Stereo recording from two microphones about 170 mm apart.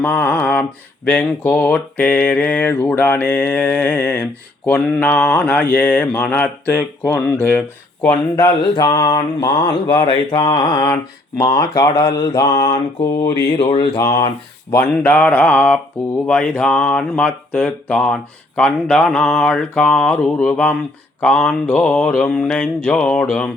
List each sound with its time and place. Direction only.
0.0 s mantra: 5° left (ahead or behind); by 13.1 s 25° left (ahead or behind)
13.6 s a sound: 35° left (ahead or behind)
13.9 s mantra: 20° left (ahead or behind)
16.2 s speech: 5° left (ahead or behind)
21.2 s mantra: 5° left (ahead or behind)